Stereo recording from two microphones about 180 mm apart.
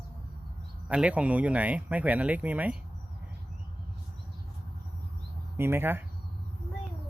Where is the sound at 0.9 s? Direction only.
5° right (ahead or behind).